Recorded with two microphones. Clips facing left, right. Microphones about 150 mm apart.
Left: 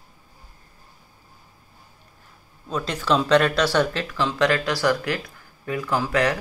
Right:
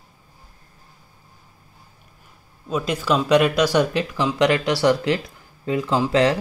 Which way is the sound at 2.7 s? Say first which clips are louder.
Right 1 dB; 10° right (ahead or behind).